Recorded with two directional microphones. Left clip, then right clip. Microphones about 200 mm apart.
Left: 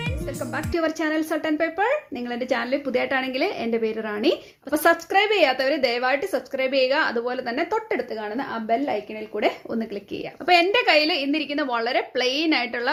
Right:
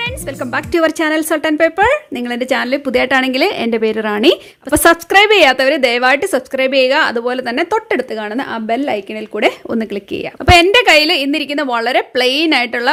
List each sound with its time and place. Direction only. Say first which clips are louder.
0.0 s a woman's voice: right 9 dB; 40° right (ahead or behind)